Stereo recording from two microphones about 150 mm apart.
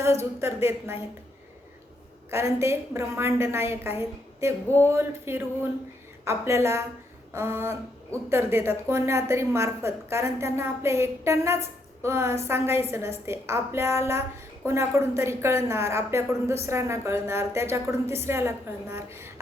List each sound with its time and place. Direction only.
0.0 s a woman's voice: 15° right (ahead or behind)
2.3 s a woman's voice: 20° right (ahead or behind)